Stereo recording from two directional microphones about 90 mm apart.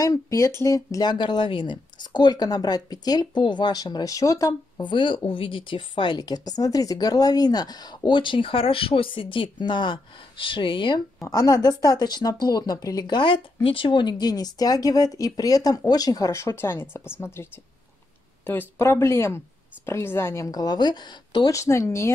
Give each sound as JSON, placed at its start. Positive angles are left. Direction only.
{"t": 0.0, "sound": "speech", "side_deg": 40}
{"t": 1.1, "sound": "speech", "side_deg": 60}
{"t": 4.8, "sound": "speech", "side_deg": 65}
{"t": 11.1, "sound": "speech", "side_deg": 40}
{"t": 13.0, "sound": "speech", "side_deg": 60}
{"t": 21.5, "sound": "speech", "side_deg": 35}